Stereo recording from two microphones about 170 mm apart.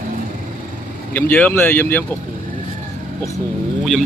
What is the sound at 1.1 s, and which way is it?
Speech, 10° left (ahead or behind).